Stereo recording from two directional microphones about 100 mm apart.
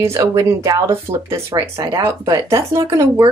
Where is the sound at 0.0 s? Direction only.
30° right (ahead or behind).